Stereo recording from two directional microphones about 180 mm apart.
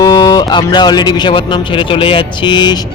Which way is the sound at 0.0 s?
20° left (ahead or behind).